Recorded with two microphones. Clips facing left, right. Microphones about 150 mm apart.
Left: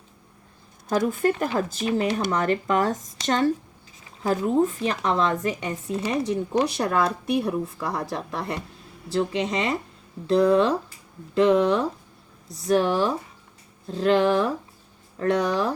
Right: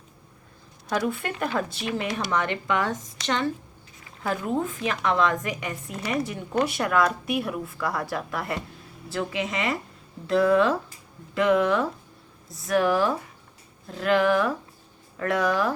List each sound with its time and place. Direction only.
0.9 s a woman's voice: 45° left (ahead or behind)